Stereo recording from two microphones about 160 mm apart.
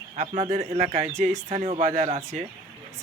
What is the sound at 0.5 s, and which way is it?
Speech, 45° right (ahead or behind).